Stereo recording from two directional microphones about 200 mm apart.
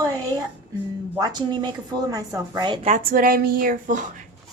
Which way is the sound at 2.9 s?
45° right (ahead or behind).